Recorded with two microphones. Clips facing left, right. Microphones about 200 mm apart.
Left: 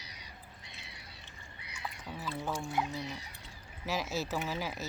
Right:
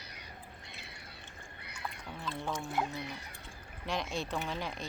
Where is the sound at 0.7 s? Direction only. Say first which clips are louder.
Right 2 dB; 55° right (ahead or behind).